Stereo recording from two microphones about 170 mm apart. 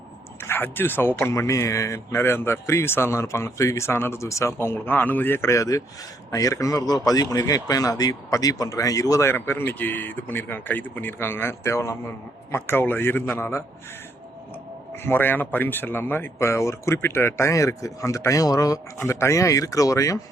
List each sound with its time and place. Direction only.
0.3 s a man's voice: 15° left (ahead or behind)
15.0 s speech: 10° left (ahead or behind)